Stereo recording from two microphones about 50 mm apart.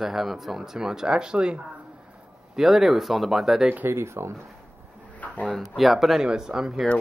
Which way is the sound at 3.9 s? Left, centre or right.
Right.